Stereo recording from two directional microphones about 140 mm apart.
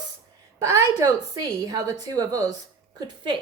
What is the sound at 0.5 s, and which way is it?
Speech, 20° right (ahead or behind).